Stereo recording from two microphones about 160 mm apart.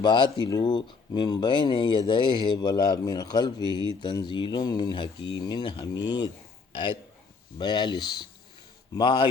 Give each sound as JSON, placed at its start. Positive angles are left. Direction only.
{"t": 0.0, "sound": "speech", "side_deg": 30}
{"t": 7.6, "sound": "speech", "side_deg": 30}